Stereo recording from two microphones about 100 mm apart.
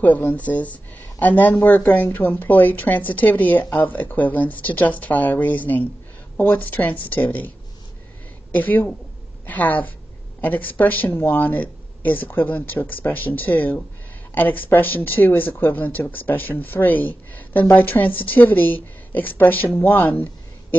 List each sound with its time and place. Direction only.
0.0 s a woman's voice: 15° left (ahead or behind)